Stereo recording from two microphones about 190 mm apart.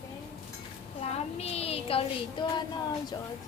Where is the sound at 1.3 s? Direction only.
35° left (ahead or behind).